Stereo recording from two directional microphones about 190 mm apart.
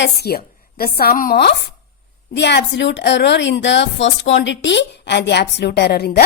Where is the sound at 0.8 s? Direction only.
55° left (ahead or behind).